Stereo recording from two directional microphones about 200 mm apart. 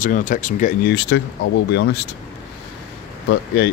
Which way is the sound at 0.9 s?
60° left (ahead or behind).